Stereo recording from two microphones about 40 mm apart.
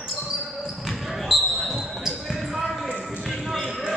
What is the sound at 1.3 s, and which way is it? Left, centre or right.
Basketball bounce, centre.